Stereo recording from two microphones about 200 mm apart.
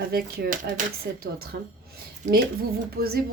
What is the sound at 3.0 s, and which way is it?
Speech, 45° right (ahead or behind).